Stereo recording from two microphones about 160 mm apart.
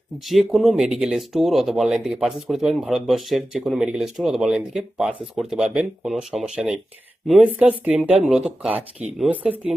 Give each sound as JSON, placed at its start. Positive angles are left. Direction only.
{"t": 0.3, "sound": "speech", "side_deg": 0}